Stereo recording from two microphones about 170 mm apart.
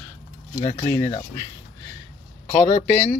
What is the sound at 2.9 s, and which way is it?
Speech, 15° left (ahead or behind).